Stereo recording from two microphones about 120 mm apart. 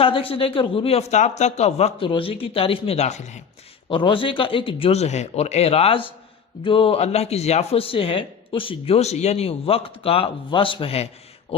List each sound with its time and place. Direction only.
0.0 s speech: 50° left (ahead or behind); by 1.9 s 70° left (ahead or behind)
2.0 s speech: 45° left (ahead or behind); by 3.4 s 75° left (ahead or behind)
3.8 s speech: 45° left (ahead or behind)